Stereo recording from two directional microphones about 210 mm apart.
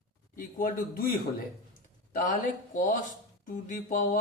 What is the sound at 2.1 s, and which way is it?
Speech, 40° left (ahead or behind).